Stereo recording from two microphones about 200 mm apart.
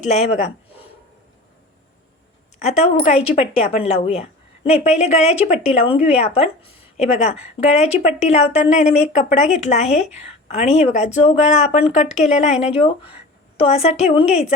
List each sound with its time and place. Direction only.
0.0 s a woman's voice: 30° left (ahead or behind)
2.6 s a woman's voice: 30° left (ahead or behind)